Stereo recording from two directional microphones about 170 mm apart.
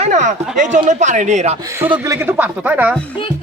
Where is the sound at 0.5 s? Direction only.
50° right (ahead or behind).